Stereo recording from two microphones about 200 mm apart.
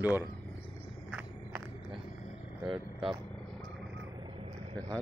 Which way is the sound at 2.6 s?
Centre (ahead or behind).